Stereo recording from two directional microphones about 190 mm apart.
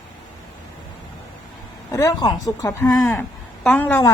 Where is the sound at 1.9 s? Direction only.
15° left (ahead or behind).